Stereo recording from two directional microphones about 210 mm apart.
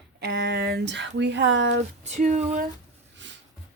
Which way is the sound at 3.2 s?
60° right (ahead or behind).